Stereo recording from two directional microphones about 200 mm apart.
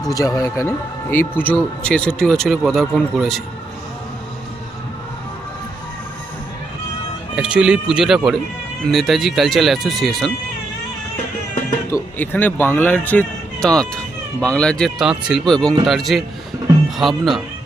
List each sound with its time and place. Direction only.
0.1 s speech: 15° left (ahead or behind); by 3.4 s centre (ahead or behind)
7.3 s speech: 5° right (ahead or behind)
11.5 s speech: 15° left (ahead or behind); by 17.4 s centre (ahead or behind)